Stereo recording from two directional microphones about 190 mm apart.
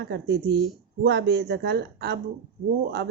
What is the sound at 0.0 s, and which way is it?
Speech, 60° right (ahead or behind).